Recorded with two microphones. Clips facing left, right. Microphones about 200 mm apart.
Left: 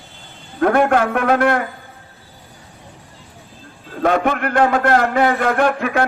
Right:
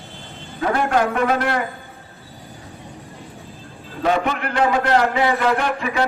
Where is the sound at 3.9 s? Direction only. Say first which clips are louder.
Left 3 dB; 50° left (ahead or behind).